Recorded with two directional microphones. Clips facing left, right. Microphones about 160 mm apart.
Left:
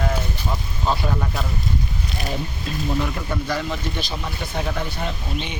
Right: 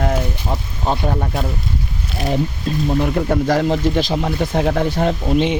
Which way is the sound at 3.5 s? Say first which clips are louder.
Right 10 dB; 85° right.